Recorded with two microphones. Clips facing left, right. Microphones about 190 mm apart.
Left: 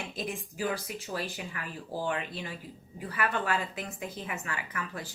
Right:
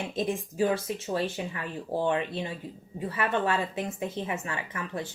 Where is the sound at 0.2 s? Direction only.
30° right (ahead or behind).